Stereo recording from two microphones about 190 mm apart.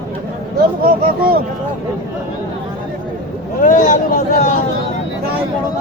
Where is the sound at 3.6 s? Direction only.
45° left (ahead or behind).